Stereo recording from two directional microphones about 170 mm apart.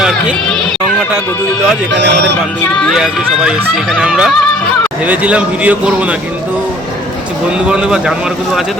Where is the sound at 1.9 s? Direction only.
90° right.